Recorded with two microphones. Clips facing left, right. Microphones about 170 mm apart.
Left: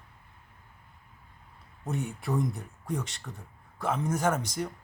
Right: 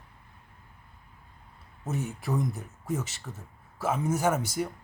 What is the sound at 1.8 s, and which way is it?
Speech, centre (ahead or behind).